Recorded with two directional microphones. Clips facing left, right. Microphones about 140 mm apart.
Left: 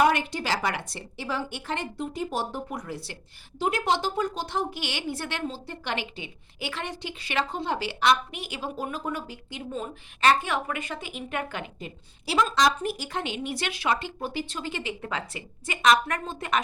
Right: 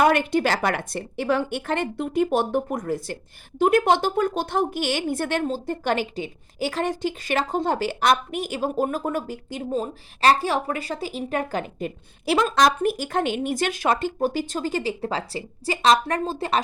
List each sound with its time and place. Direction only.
0.0 s a woman's voice: 55° right (ahead or behind); by 11.7 s 35° right (ahead or behind)
11.8 s speech: 55° right (ahead or behind); by 16.6 s 30° right (ahead or behind)